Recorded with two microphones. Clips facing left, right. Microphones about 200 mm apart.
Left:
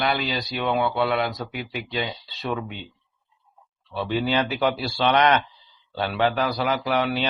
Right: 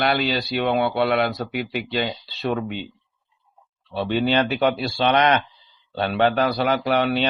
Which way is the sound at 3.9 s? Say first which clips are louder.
Right 3 dB; 30° right (ahead or behind).